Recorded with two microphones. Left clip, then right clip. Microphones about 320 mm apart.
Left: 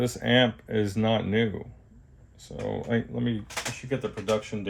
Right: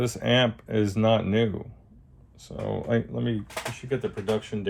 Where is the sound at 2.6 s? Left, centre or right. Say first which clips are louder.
Right 2 dB; centre.